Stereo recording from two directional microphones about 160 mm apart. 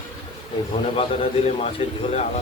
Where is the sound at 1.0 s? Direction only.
40° left (ahead or behind).